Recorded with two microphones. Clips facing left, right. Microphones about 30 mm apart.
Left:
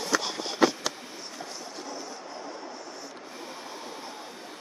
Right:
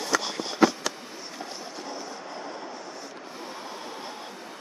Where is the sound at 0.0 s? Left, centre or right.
Centre.